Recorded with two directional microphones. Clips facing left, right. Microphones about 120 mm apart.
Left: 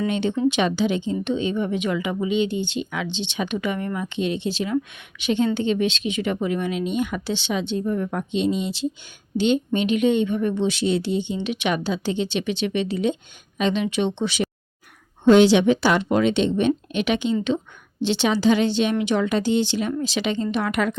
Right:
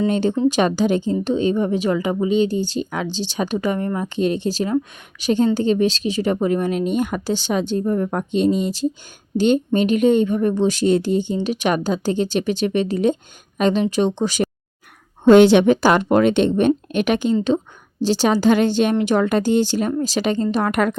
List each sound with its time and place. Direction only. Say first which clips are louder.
0.1 s a woman's voice: right 3 dB; 40° right (ahead or behind)